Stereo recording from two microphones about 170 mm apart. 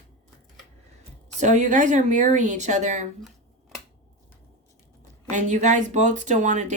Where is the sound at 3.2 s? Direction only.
Centre (ahead or behind).